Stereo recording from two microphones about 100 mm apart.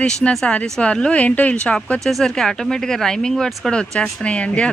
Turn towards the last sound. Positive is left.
turn(degrees=10)  # may be behind; listen again after turning